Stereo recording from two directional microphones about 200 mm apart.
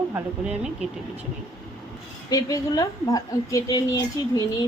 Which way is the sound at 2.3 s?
15° left (ahead or behind).